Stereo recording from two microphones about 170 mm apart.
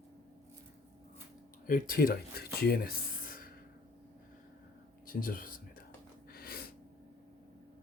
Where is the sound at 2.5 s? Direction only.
65° left (ahead or behind).